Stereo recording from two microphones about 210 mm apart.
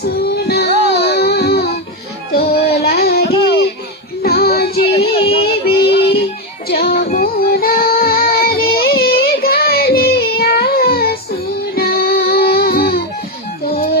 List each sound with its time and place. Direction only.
0.0 s child singing: 50° left (ahead or behind)
2.3 s music: 50° left (ahead or behind)
4.9 s music: 25° left (ahead or behind)
6.7 s child singing: 50° left (ahead or behind)